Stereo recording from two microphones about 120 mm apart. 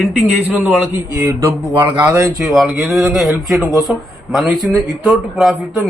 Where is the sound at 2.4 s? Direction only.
Centre (ahead or behind).